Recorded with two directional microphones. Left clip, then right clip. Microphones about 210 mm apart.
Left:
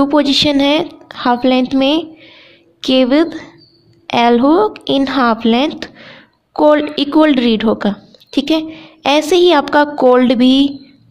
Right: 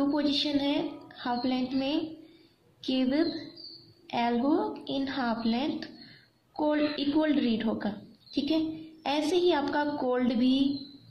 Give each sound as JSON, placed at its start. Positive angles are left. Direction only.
{"t": 0.0, "sound": "a woman's voice", "side_deg": 55}